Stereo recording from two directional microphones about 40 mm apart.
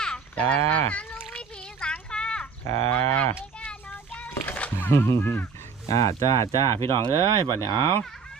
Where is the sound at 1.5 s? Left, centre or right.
Left.